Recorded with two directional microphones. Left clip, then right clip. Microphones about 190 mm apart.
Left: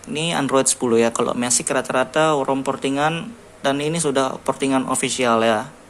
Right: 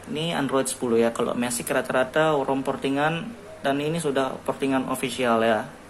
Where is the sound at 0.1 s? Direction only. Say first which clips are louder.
Left 5 dB; 20° left (ahead or behind).